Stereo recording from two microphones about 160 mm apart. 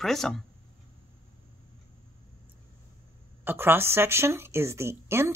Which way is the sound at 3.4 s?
15° right (ahead or behind).